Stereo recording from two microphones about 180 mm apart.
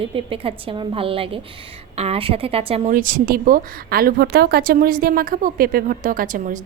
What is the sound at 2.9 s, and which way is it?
A woman's voice, 50° right (ahead or behind).